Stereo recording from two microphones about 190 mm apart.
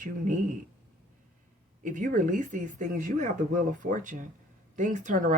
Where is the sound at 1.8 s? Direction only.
45° right (ahead or behind).